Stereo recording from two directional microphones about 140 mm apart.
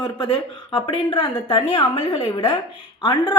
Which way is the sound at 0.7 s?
35° left (ahead or behind).